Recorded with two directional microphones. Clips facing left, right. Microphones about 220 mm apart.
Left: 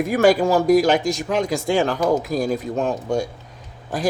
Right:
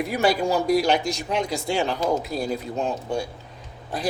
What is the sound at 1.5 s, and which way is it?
Speech, 90° left.